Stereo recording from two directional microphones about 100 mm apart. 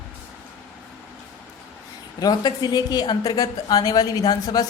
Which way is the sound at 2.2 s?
40° left (ahead or behind).